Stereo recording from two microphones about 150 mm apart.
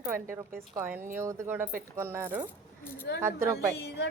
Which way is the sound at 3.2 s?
20° right (ahead or behind).